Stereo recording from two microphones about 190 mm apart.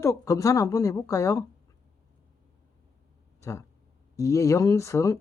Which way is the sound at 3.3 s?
15° left (ahead or behind).